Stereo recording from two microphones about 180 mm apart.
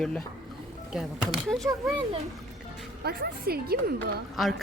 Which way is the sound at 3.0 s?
55° right (ahead or behind).